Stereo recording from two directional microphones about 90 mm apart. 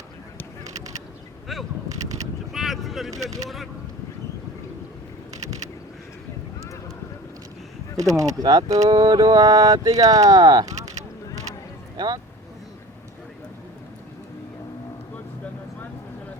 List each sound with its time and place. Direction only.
2.5 s vehicle: centre (ahead or behind)
3.1 s speech: 40° right (ahead or behind)
7.9 s speech: 40° right (ahead or behind)
10.7 s a sound: 40° right (ahead or behind)
11.9 s speech: 50° right (ahead or behind)